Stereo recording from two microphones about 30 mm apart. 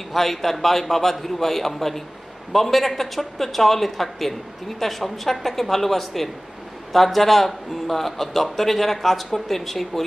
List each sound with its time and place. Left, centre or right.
0.1 s speech: centre